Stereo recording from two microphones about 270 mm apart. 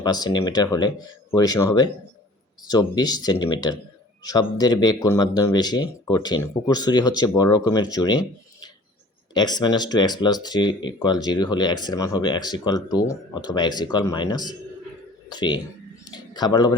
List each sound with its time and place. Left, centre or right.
0.0 s speech: centre
9.3 s a man's voice: centre